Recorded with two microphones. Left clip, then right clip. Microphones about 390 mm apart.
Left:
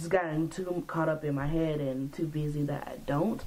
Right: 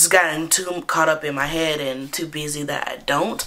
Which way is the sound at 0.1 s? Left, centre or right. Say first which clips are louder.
Right 8 dB; centre.